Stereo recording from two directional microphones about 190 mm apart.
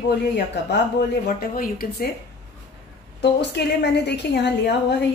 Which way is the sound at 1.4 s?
50° left (ahead or behind).